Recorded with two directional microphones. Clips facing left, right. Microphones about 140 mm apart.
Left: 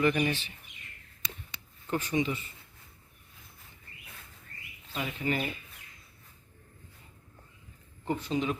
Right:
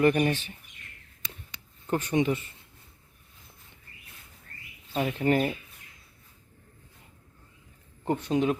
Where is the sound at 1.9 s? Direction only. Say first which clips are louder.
Right 4 dB; 50° right (ahead or behind).